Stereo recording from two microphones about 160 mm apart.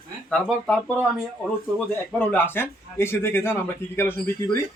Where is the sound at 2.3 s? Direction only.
10° left (ahead or behind).